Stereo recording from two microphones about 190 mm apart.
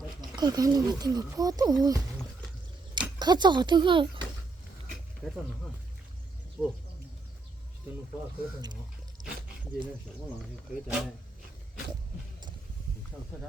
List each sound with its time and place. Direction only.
0.2 s speech: 20° right (ahead or behind)
6.6 s speech: 5° right (ahead or behind)